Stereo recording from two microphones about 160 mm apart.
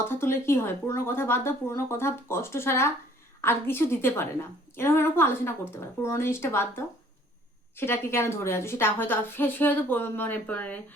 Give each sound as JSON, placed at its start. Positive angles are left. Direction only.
{"t": 0.1, "sound": "a woman's voice", "side_deg": 15}